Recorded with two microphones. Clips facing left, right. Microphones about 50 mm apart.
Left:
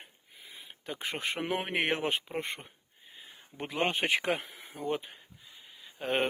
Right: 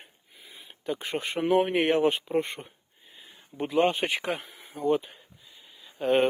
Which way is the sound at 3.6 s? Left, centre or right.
Left.